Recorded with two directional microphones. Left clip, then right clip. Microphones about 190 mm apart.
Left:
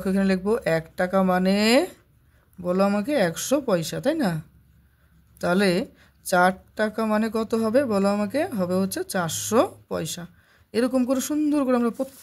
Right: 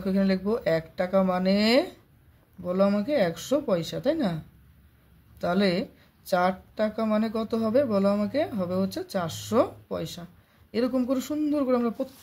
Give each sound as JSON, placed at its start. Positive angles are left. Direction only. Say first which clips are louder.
{"t": 0.0, "sound": "speech", "louder": "left 3 dB", "side_deg": 40}
{"t": 5.4, "sound": "speech", "louder": "left 3 dB", "side_deg": 45}